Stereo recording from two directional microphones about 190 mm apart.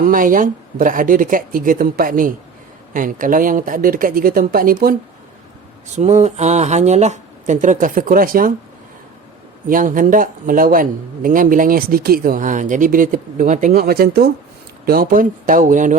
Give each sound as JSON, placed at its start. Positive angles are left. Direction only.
{"t": 0.0, "sound": "a man's voice", "side_deg": -45}
{"t": 5.9, "sound": "speech", "side_deg": -40}
{"t": 9.6, "sound": "a man's voice", "side_deg": -45}